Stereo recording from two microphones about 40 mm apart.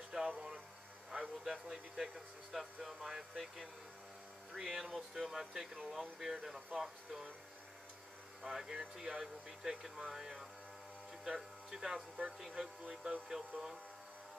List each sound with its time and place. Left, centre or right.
0.1 s music: centre
1.1 s speech: centre
8.4 s speech: centre